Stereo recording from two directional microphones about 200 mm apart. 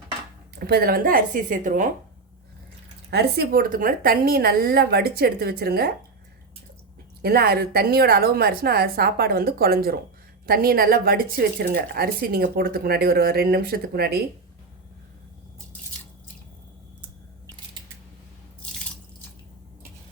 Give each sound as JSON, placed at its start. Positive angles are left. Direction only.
{"t": 0.6, "sound": "a woman's voice", "side_deg": -50}
{"t": 3.1, "sound": "a woman's voice", "side_deg": -55}
{"t": 7.2, "sound": "a woman's voice", "side_deg": -50}
{"t": 17.0, "sound": "scissors", "side_deg": -15}